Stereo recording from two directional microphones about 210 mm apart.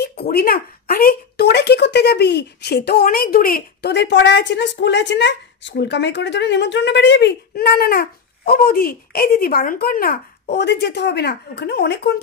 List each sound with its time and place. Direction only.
0.0 s a woman's voice: 50° left (ahead or behind)